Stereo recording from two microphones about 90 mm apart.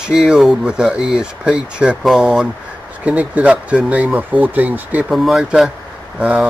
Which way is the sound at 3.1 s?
15° right (ahead or behind).